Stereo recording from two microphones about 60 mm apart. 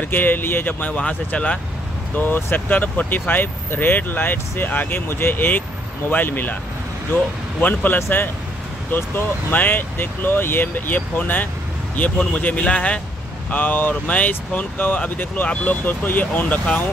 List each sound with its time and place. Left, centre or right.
0.0 s speech: left
2.1 s speech: left
7.6 s speech: left